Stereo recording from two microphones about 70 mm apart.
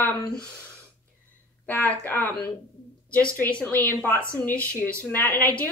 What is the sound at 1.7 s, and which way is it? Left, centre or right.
A woman's voice, left.